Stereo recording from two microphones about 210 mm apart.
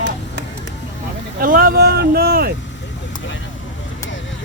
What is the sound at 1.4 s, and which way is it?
Speech, 40° right (ahead or behind).